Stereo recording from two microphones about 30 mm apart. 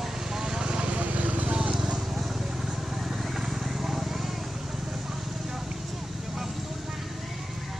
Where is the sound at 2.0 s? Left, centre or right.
Centre.